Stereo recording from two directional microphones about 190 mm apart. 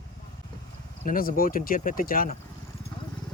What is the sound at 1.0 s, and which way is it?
Speech, 50° left (ahead or behind).